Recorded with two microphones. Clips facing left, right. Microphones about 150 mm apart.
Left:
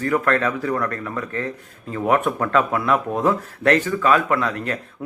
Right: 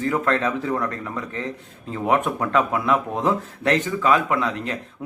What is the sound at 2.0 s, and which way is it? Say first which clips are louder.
Speech: left 2 dB; 15° right (ahead or behind).